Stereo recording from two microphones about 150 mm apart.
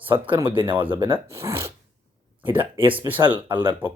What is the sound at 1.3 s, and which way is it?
Speech, 20° right (ahead or behind).